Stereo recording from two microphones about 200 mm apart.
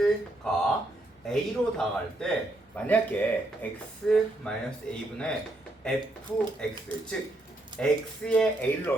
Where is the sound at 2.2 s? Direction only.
5° left (ahead or behind).